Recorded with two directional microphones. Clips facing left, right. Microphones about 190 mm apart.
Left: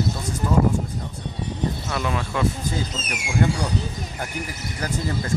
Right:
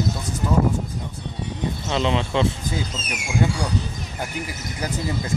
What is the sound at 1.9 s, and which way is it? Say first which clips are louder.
Speech: right 4 dB; 25° right (ahead or behind).